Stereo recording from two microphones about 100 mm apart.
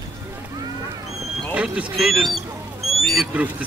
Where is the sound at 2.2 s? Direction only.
Centre (ahead or behind).